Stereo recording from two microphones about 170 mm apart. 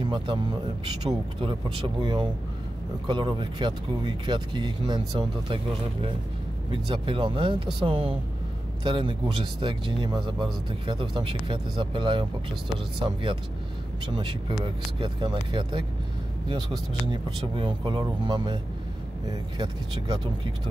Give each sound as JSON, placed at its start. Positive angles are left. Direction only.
{"t": 0.0, "sound": "a man's voice", "side_deg": -30}
{"t": 6.7, "sound": "a man's voice", "side_deg": -30}